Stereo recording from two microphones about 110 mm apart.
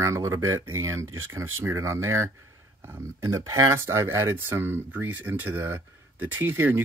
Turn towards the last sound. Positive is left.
turn(degrees=-20)  # may be behind; listen again after turning